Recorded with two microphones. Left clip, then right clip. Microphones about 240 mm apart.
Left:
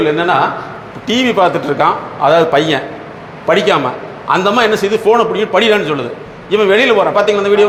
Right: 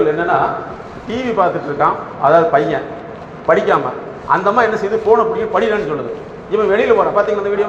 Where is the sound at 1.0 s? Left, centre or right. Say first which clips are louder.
Left 4 dB; left.